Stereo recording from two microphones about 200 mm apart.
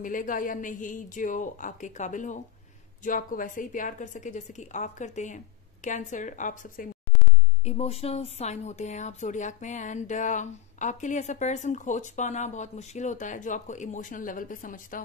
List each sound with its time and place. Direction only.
0.0 s speech: 40° left (ahead or behind)